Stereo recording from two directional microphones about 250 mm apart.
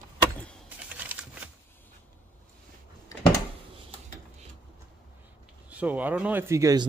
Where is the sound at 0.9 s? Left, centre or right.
Centre.